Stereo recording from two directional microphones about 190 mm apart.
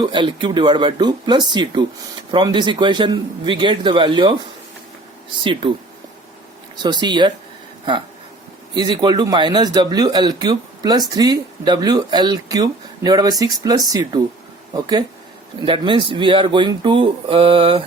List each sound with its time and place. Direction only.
0.0 s speech: 25° right (ahead or behind)
5.4 s speech: 25° right (ahead or behind)
6.8 s speech: 25° right (ahead or behind)
8.7 s speech: 25° right (ahead or behind)
15.6 s speech: 25° right (ahead or behind)